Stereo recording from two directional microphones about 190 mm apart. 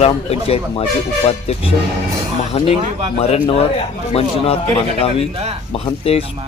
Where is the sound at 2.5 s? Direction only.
30° left (ahead or behind).